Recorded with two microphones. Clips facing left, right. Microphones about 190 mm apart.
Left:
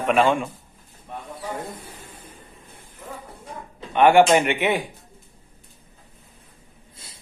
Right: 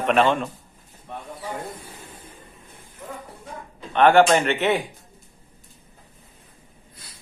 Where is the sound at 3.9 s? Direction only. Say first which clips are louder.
Left 1 dB; 10° left (ahead or behind).